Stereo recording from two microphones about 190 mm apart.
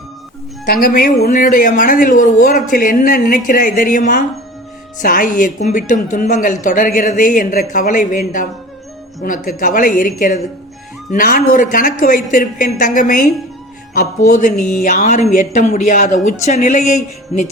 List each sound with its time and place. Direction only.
0.7 s speech: 50° left (ahead or behind)